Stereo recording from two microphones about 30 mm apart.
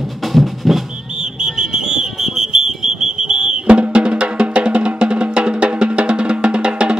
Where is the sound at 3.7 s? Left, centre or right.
Right.